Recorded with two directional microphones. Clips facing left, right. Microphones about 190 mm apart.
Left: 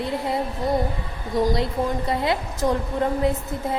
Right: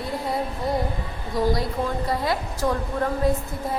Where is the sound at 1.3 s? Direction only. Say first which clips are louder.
Left 2 dB; 25° left (ahead or behind).